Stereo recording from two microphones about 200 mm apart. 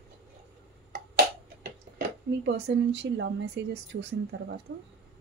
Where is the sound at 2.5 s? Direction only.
60° right (ahead or behind).